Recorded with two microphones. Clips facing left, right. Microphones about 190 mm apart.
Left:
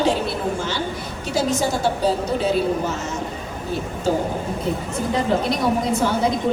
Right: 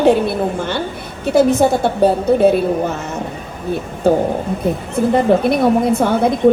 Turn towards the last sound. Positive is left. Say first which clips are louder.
# right 6 dB
turn(degrees=-55)  # may be behind; listen again after turning